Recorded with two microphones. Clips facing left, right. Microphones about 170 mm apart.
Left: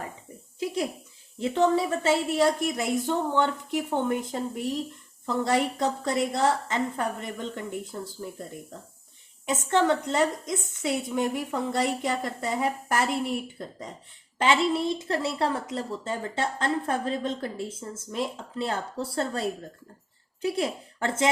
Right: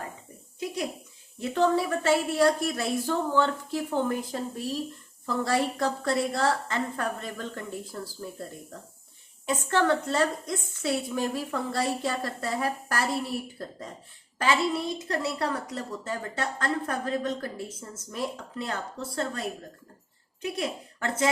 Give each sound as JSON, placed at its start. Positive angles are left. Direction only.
{"t": 1.4, "sound": "a woman's voice", "side_deg": 20}
{"t": 9.5, "sound": "a woman's voice", "side_deg": 20}